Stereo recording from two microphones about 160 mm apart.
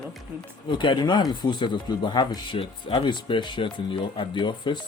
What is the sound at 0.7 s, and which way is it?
Speech, 30° left (ahead or behind).